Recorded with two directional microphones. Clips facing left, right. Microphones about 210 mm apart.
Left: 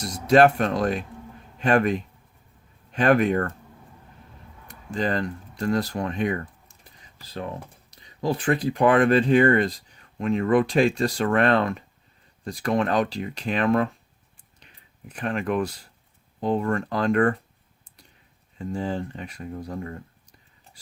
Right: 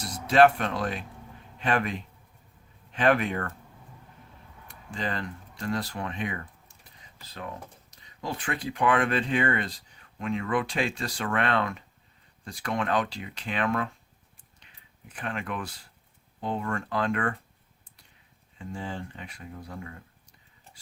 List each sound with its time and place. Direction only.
0.0 s speech: 45° left (ahead or behind)
4.7 s speech: 40° left (ahead or behind)
8.2 s speech: 35° left (ahead or behind)
15.1 s speech: 40° left (ahead or behind)
18.6 s speech: 40° left (ahead or behind)